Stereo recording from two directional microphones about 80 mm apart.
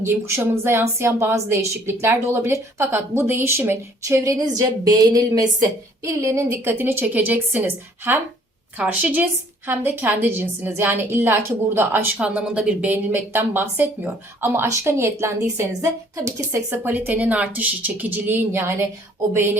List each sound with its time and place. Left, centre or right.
0.0 s a woman's voice: right
4.9 s speech: right
6.0 s speech: right
12.2 s speech: centre; by 16.7 s right
16.7 s speech: right